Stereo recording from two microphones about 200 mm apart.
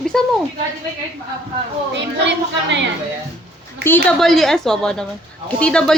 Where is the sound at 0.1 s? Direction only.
5° left (ahead or behind).